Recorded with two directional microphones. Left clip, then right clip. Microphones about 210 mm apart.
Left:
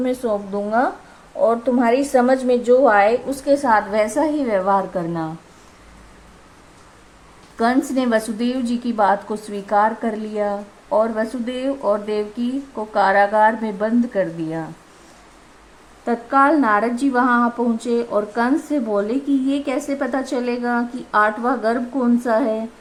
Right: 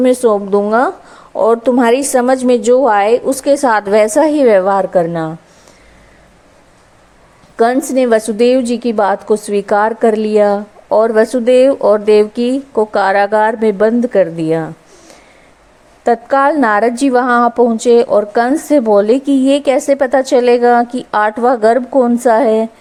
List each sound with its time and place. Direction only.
0.0 s a woman's voice: 35° right (ahead or behind)
7.5 s a woman's voice: 35° right (ahead or behind)
16.0 s a woman's voice: 40° right (ahead or behind)